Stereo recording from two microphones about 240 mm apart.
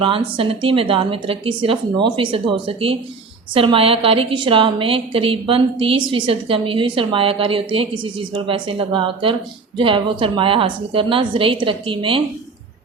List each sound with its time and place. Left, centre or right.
0.0 s a woman's voice: right